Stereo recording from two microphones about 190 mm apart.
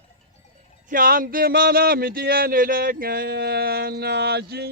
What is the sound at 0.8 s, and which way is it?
Speech, 50° right (ahead or behind).